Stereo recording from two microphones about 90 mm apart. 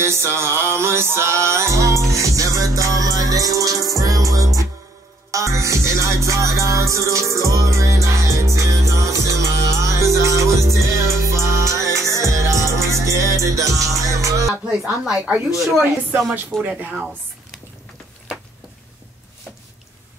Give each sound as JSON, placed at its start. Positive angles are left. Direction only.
{"t": 0.0, "sound": "music", "side_deg": -30}
{"t": 14.9, "sound": "speech", "side_deg": -10}
{"t": 16.6, "sound": "speech", "side_deg": -15}